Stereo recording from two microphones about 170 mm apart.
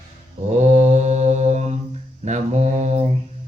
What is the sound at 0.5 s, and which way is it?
Mantra, 40° right (ahead or behind).